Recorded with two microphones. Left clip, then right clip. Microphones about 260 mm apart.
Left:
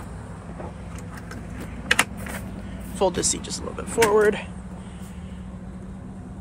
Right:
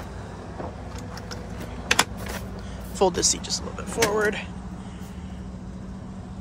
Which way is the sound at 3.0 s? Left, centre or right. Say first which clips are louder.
Right 1 dB; centre.